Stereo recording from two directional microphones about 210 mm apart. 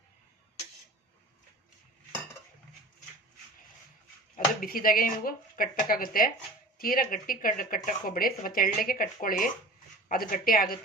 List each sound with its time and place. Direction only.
4.4 s speech: 40° left (ahead or behind)